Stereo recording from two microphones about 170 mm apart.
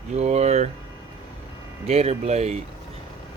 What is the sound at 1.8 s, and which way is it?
Speech, 40° right (ahead or behind).